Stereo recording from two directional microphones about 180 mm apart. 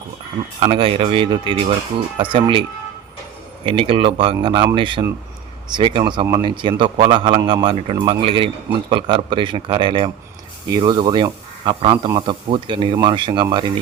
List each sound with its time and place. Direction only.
0.6 s a man's voice: 30° right (ahead or behind)
3.7 s a man's voice: 30° right (ahead or behind)